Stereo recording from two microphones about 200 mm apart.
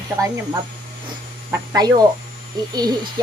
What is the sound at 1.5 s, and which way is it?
Speech, 20° right (ahead or behind).